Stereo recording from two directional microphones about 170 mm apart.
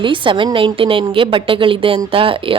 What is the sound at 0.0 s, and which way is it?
A woman's voice, 30° right (ahead or behind).